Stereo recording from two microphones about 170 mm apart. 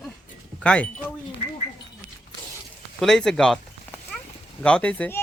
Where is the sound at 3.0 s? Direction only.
Centre (ahead or behind).